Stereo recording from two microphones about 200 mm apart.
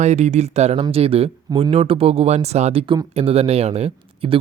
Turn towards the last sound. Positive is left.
turn(degrees=-30)  # may be behind; listen again after turning